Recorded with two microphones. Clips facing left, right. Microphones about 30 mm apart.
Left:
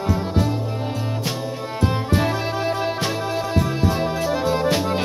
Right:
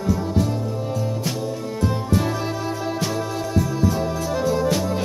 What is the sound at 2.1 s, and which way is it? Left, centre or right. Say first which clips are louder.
Music: left 1 dB; left.